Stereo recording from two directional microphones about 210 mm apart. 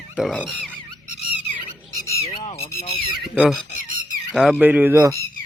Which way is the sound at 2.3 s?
30° left (ahead or behind).